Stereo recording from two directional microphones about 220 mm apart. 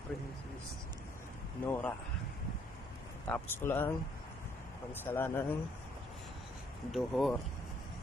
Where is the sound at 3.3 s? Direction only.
10° left (ahead or behind).